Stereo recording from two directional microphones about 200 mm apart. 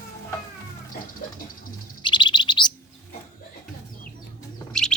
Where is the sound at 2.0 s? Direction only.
25° left (ahead or behind).